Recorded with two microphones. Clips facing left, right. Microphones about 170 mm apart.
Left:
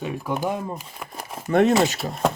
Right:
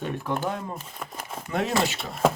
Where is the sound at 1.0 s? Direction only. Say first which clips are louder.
Even; 5° left (ahead or behind).